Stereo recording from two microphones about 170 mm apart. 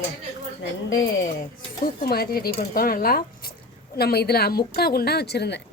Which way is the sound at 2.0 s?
65° left (ahead or behind).